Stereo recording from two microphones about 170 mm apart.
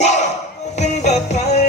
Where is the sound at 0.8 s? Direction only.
40° left (ahead or behind).